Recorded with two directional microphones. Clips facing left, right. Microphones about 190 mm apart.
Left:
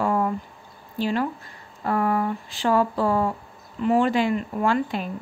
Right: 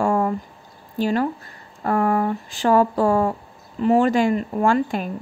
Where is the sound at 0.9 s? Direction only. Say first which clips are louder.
Right 3 dB; 45° right (ahead or behind).